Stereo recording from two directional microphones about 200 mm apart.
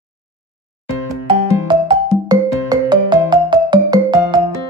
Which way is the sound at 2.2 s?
20° right (ahead or behind).